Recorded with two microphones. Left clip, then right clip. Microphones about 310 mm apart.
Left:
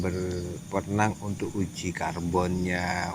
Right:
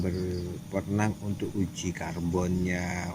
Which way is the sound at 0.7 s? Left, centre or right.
Centre.